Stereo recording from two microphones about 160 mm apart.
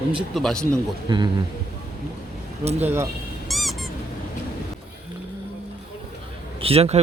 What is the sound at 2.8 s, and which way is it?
Speech, 15° right (ahead or behind).